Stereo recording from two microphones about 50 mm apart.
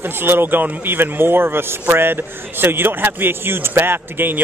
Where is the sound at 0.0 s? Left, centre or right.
Right.